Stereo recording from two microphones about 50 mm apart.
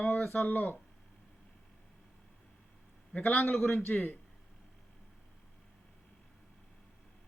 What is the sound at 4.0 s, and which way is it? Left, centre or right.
Speech, left.